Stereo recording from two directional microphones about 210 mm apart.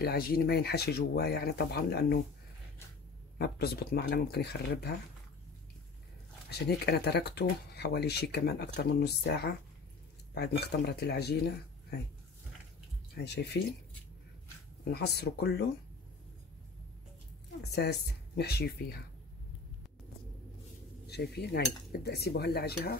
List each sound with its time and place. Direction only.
0.0 s speech: 45° left (ahead or behind)
3.3 s speech: 50° left (ahead or behind)
6.5 s speech: 50° left (ahead or behind)
13.1 s speech: 50° left (ahead or behind)
14.9 s speech: 50° left (ahead or behind)
17.7 s speech: 50° left (ahead or behind)
21.1 s speech: 50° left (ahead or behind)